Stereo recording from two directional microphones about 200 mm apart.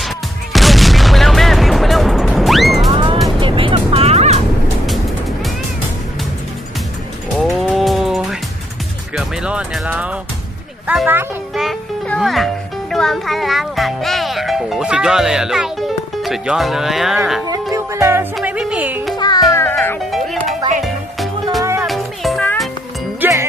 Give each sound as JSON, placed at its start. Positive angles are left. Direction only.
{"t": 0.5, "sound": "music", "side_deg": 0}
{"t": 2.9, "sound": "music", "side_deg": -25}
{"t": 7.3, "sound": "music", "side_deg": 0}
{"t": 17.4, "sound": "music", "side_deg": -15}
{"t": 19.1, "sound": "music", "side_deg": 20}
{"t": 20.1, "sound": "music", "side_deg": 0}
{"t": 21.6, "sound": "music", "side_deg": -15}
{"t": 21.8, "sound": "music", "side_deg": 0}
{"t": 23.2, "sound": "music", "side_deg": -15}